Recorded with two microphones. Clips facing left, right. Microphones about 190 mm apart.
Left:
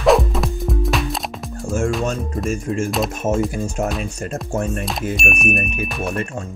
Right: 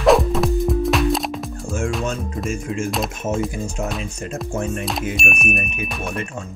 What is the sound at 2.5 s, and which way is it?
Speech, 45° left (ahead or behind).